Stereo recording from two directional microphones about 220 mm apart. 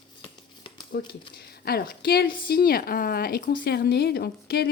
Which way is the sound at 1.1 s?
45° left (ahead or behind).